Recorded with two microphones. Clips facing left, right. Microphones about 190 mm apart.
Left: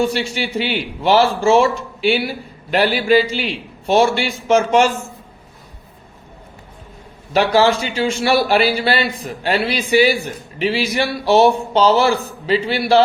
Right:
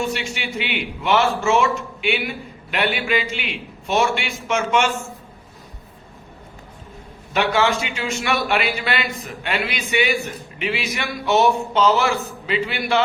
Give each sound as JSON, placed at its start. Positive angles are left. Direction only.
{"t": 0.0, "sound": "a man's voice", "side_deg": 35}
{"t": 7.3, "sound": "a man's voice", "side_deg": 35}